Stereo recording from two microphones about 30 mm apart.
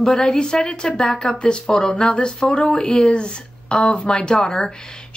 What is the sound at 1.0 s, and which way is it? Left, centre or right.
Speech, centre.